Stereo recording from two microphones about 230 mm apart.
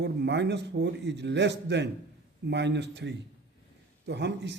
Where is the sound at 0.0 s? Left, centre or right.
Right.